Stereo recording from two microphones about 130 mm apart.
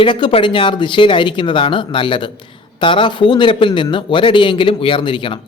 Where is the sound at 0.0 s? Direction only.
40° left (ahead or behind).